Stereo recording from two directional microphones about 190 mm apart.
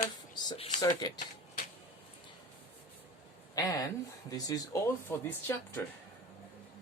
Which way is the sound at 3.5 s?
20° left (ahead or behind).